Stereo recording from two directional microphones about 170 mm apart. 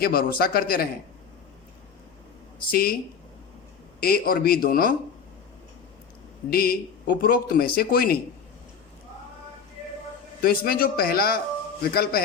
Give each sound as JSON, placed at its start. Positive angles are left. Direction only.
{"t": 0.0, "sound": "speech", "side_deg": 60}
{"t": 2.6, "sound": "speech", "side_deg": 60}
{"t": 4.0, "sound": "speech", "side_deg": 60}
{"t": 6.5, "sound": "speech", "side_deg": 60}
{"t": 10.4, "sound": "speech", "side_deg": 60}